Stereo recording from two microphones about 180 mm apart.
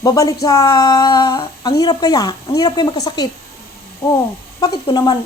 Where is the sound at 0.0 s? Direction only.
20° left (ahead or behind).